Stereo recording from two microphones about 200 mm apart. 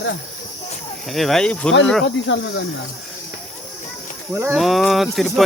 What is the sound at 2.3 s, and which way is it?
Speech, 65° left (ahead or behind).